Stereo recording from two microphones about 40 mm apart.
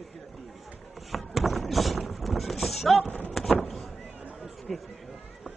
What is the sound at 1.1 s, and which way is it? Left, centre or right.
Vehicle, centre.